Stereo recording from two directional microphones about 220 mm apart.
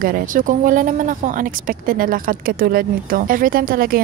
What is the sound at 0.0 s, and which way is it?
A woman's voice, 40° right (ahead or behind).